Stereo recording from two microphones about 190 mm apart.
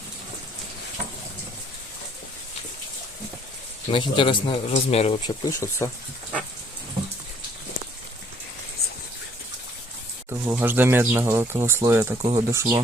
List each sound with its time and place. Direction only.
3.9 s speech: 25° left (ahead or behind)
5.2 s speech: 15° left (ahead or behind)
10.2 s speech: 10° right (ahead or behind)